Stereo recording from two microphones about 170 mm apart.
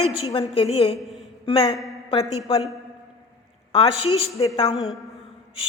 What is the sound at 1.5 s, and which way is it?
A woman's voice, 35° left (ahead or behind).